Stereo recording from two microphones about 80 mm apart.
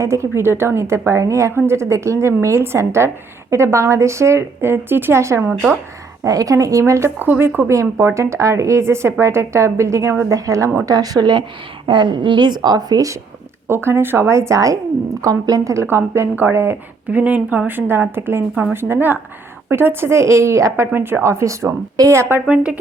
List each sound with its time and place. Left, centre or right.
0.0 s a woman's voice: right
6.2 s a woman's voice: right
7.2 s speech: right
7.7 s a woman's voice: right
11.9 s speech: right
13.7 s a woman's voice: right
20.9 s a woman's voice: right
22.4 s speech: centre